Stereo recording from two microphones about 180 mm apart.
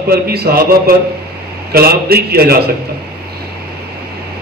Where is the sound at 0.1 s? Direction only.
60° right (ahead or behind).